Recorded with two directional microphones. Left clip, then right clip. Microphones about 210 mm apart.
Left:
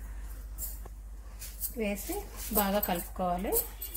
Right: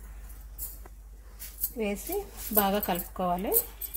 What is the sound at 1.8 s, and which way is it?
A woman's voice, 30° right (ahead or behind).